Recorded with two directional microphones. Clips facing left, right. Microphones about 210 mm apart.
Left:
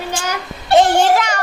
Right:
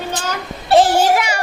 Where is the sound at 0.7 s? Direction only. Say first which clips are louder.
Even; centre (ahead or behind).